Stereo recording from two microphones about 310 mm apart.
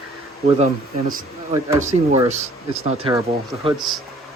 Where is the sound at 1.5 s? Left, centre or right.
Centre.